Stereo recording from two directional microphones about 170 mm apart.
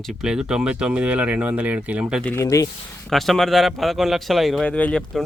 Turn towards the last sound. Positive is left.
turn(degrees=5)  # may be behind; listen again after turning